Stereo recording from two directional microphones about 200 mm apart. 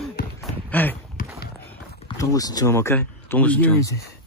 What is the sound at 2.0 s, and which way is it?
Speech, 20° left (ahead or behind).